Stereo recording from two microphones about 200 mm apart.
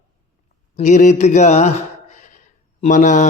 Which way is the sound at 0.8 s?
40° left (ahead or behind).